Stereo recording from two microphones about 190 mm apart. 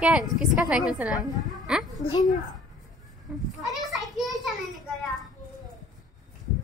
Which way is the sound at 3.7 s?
Centre (ahead or behind).